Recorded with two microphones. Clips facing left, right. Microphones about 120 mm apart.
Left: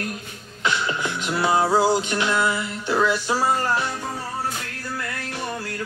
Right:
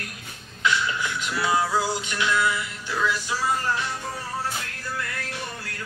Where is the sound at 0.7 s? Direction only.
35° left (ahead or behind); by 3.7 s 50° left (ahead or behind).